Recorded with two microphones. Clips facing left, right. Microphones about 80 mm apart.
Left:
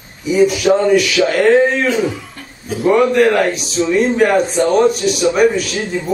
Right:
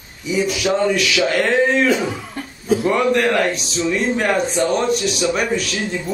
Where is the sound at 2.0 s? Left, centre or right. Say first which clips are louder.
Left 4 dB; right.